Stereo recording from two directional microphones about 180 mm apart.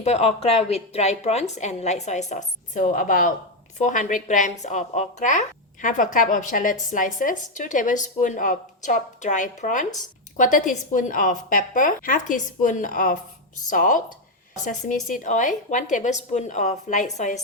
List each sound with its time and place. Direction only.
0.0 s a woman's voice: 35° left (ahead or behind)